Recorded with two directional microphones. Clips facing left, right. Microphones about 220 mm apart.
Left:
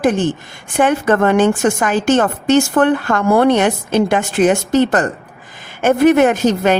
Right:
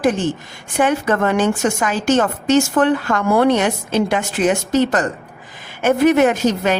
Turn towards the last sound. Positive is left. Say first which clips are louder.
# left 3 dB
turn(degrees=50)  # may be behind; listen again after turning